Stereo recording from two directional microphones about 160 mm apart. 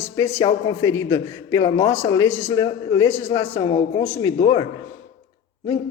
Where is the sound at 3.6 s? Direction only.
30° left (ahead or behind).